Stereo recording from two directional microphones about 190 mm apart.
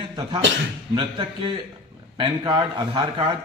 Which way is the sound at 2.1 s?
25° right (ahead or behind).